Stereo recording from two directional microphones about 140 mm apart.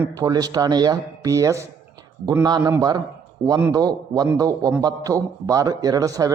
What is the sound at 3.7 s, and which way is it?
A man's voice, 30° right (ahead or behind).